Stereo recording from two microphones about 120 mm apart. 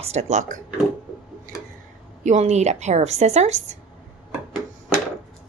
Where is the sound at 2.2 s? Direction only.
70° right (ahead or behind).